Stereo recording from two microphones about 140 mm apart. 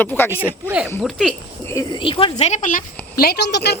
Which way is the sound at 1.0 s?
Centre (ahead or behind).